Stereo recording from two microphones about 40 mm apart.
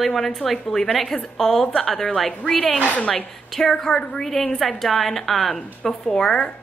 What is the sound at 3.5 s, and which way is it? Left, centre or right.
A woman's voice, centre.